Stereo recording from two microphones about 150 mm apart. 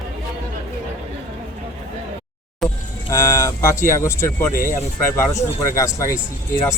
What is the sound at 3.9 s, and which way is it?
Speech, 20° left (ahead or behind).